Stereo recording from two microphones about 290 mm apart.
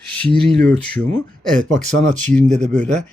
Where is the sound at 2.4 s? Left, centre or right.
Right.